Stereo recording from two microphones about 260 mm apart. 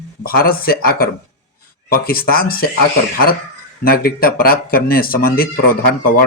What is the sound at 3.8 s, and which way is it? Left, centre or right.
Speech, left.